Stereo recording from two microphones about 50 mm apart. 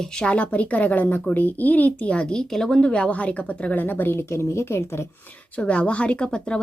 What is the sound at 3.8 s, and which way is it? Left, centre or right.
Speech, left.